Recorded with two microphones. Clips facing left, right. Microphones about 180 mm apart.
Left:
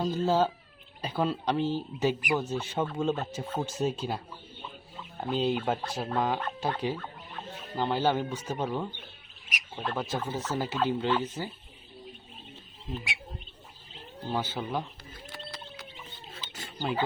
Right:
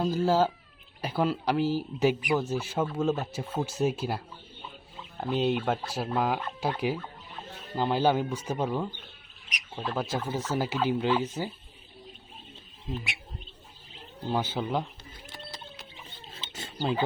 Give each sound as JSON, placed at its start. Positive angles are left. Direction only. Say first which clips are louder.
{"t": 0.0, "sound": "speech", "louder": "right 1 dB", "side_deg": -10}
{"t": 5.3, "sound": "speech", "louder": "right 1 dB", "side_deg": 0}
{"t": 14.3, "sound": "speech", "louder": "right 3 dB", "side_deg": -15}
{"t": 15.4, "sound": "a sound", "louder": "left 1 dB", "side_deg": -25}